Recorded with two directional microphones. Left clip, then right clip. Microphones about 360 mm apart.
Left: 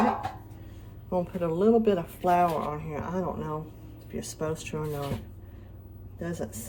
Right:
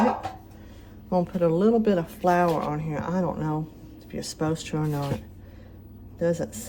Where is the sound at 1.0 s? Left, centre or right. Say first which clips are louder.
Right 5 dB; right.